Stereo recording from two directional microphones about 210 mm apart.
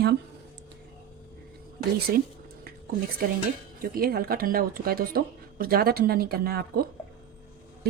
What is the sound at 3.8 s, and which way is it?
Speech, 45° right (ahead or behind).